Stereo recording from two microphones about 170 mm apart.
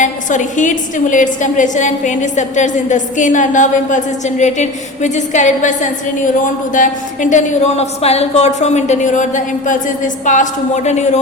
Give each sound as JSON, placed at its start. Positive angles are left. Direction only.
{"t": 0.0, "sound": "a woman's voice", "side_deg": 45}